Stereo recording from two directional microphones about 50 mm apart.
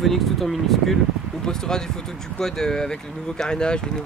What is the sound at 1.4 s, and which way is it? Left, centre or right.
Speech, centre.